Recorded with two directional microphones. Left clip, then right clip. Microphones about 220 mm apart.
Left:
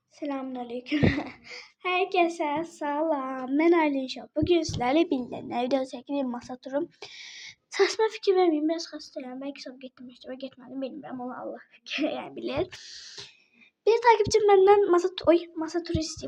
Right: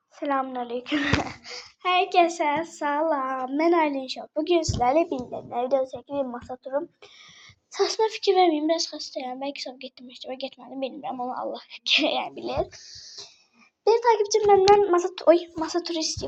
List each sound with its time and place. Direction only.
0.2 s a woman's voice: 25° left (ahead or behind); by 5.0 s 40° left (ahead or behind)
5.0 s a woman's voice: 55° left (ahead or behind)
7.7 s a woman's voice: 40° left (ahead or behind)
13.8 s speech: 40° left (ahead or behind); by 16.2 s 25° left (ahead or behind)